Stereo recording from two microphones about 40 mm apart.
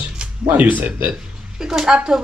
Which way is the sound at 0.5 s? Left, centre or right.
Right.